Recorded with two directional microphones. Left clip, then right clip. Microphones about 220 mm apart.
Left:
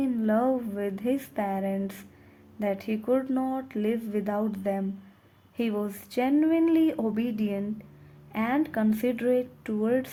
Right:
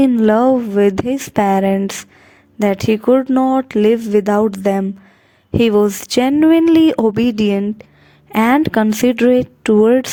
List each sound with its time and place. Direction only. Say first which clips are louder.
0.0 s speech: right 14 dB; 50° right (ahead or behind)